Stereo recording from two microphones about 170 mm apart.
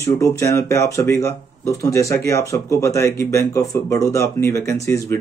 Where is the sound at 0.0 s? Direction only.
15° left (ahead or behind).